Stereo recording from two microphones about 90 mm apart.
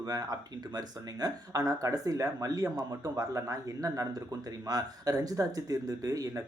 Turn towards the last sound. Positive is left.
turn(degrees=-40)  # may be behind; listen again after turning